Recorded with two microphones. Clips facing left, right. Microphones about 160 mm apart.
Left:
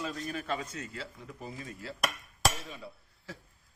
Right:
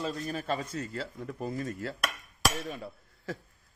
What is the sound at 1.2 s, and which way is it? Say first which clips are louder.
Speech: right 8 dB; 55° right (ahead or behind).